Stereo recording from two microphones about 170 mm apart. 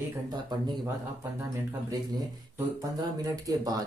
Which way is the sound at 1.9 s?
20° right (ahead or behind).